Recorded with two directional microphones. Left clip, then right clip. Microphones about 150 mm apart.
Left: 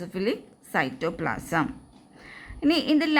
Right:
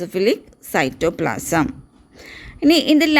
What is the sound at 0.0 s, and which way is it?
A woman's voice, 50° right (ahead or behind).